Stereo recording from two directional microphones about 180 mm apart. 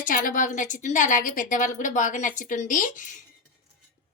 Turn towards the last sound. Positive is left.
turn(degrees=45)  # may be behind; listen again after turning